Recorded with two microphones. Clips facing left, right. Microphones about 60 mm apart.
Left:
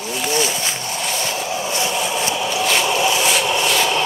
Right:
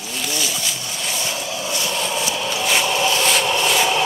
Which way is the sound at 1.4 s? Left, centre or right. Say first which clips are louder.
Left 3 dB; left.